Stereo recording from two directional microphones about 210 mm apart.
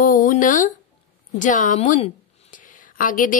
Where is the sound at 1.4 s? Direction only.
35° left (ahead or behind).